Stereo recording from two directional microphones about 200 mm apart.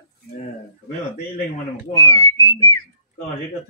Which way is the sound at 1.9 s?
15° left (ahead or behind).